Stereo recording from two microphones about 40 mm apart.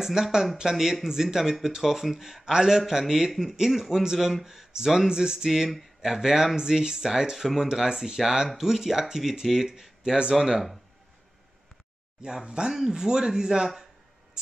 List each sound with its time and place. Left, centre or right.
0.0 s a man's voice: centre
5.5 s a man's voice: centre
12.4 s speech: right